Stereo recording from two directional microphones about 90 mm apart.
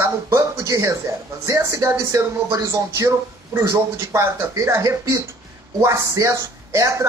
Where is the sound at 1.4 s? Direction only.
30° right (ahead or behind).